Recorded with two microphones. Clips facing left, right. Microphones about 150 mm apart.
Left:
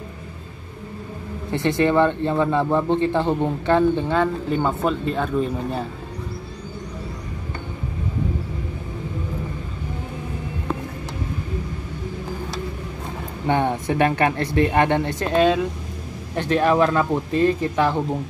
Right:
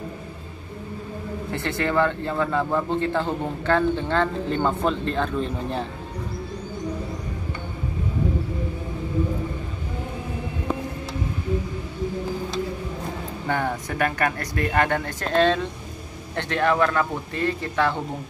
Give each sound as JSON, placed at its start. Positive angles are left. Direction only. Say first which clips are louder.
{"t": 1.5, "sound": "speech", "louder": "left 6 dB", "side_deg": 15}
{"t": 13.5, "sound": "speech", "louder": "left 6 dB", "side_deg": 25}